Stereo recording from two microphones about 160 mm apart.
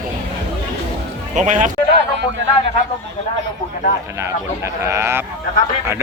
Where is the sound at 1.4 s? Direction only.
50° right (ahead or behind).